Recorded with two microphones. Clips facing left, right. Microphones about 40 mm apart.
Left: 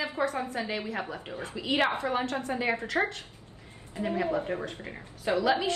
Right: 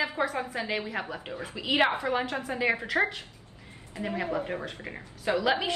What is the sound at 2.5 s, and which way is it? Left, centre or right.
Speech, right.